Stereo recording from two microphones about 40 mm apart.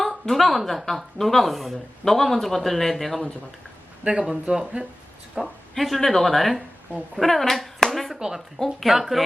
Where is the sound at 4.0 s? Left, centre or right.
Right.